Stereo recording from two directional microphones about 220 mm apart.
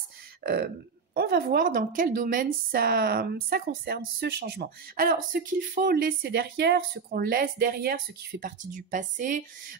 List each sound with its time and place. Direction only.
0.4 s a woman's voice: 45° right (ahead or behind)